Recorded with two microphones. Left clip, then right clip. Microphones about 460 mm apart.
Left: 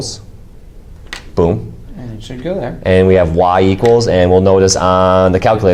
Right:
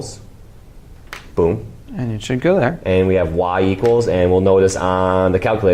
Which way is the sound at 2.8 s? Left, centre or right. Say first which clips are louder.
Left 6 dB; centre.